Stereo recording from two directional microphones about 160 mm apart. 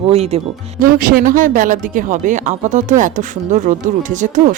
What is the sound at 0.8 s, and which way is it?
Speech, 60° right (ahead or behind).